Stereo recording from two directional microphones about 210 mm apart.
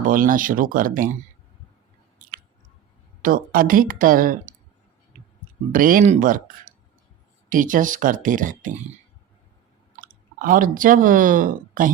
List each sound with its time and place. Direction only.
0.1 s speech: 40° right (ahead or behind)
3.2 s speech: 40° right (ahead or behind)
5.7 s speech: 40° right (ahead or behind)
7.5 s speech: 40° right (ahead or behind)
9.9 s speech: 40° right (ahead or behind)